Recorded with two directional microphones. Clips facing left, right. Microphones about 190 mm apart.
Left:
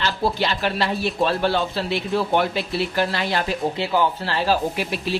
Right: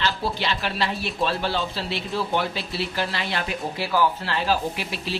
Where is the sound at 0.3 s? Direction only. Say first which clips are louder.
Left 4 dB; 45° left (ahead or behind).